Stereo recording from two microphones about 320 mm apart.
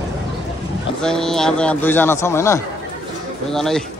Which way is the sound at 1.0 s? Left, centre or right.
Centre.